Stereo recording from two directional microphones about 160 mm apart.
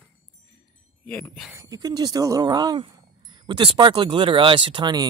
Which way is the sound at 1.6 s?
20° right (ahead or behind).